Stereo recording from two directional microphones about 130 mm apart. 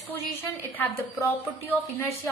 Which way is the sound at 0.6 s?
15° left (ahead or behind).